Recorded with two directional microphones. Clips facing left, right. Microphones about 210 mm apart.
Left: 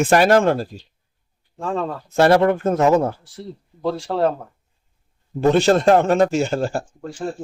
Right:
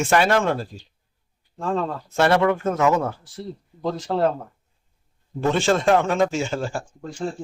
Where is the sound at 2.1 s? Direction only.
40° left (ahead or behind).